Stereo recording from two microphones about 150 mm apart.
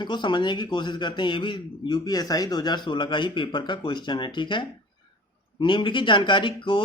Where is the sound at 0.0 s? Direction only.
30° left (ahead or behind).